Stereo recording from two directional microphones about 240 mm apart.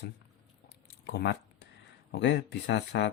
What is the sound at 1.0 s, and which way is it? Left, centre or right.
Speech, left.